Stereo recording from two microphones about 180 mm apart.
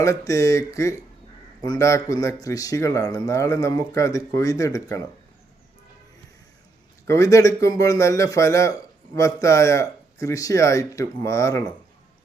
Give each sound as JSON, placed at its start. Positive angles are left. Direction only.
{"t": 0.0, "sound": "a man's voice", "side_deg": 15}
{"t": 7.1, "sound": "a man's voice", "side_deg": 15}